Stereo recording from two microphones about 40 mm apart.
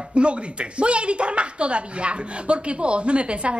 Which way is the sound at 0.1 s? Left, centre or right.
Right.